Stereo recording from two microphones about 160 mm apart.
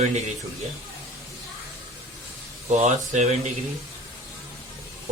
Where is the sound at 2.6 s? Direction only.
45° right (ahead or behind).